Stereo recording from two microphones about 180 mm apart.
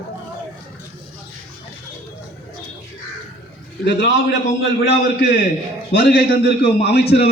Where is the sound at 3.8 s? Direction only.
70° left (ahead or behind).